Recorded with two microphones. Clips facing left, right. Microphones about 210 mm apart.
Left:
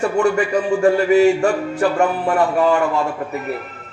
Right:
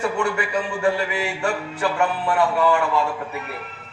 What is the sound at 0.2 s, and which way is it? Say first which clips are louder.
A man's voice: left 7 dB; 45° left (ahead or behind).